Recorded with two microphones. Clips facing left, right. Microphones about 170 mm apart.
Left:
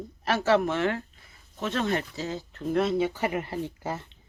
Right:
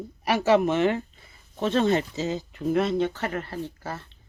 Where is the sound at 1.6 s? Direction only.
30° right (ahead or behind); by 2.7 s 15° right (ahead or behind).